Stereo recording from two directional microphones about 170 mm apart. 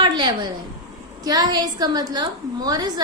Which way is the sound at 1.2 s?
25° right (ahead or behind).